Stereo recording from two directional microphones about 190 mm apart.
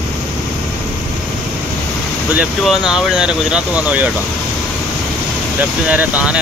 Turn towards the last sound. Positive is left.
turn(degrees=-5)  # may be behind; listen again after turning